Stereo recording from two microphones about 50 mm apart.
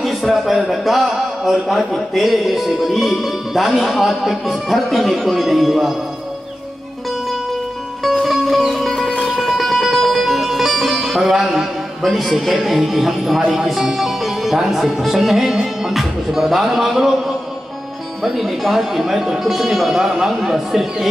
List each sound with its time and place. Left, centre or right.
0.0 s a man's voice: centre
8.0 s music: centre
15.5 s a man's voice: centre